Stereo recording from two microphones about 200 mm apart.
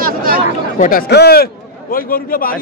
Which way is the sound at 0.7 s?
40° left (ahead or behind).